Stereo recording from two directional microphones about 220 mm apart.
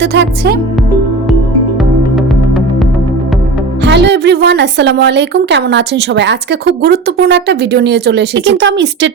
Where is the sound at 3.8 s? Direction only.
50° right (ahead or behind).